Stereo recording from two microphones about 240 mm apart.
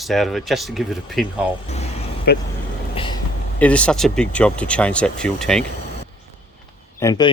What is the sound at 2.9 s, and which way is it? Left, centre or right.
Vehicle, left.